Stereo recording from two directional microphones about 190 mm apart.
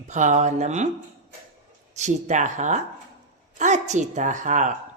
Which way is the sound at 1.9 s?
40° right (ahead or behind).